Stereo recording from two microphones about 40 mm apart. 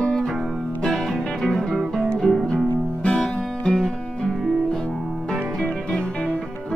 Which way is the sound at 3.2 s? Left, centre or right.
Centre.